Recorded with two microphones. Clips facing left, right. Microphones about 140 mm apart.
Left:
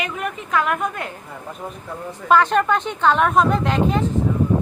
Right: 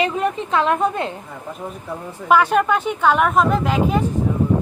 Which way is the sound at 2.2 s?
10° right (ahead or behind).